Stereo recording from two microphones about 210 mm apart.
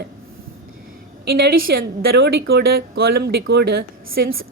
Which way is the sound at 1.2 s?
50° right (ahead or behind).